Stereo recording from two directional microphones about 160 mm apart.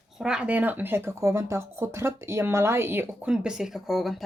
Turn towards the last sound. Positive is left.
turn(degrees=0)  # may be behind; listen again after turning